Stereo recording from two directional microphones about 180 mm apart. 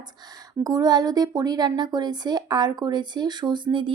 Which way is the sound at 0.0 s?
20° right (ahead or behind).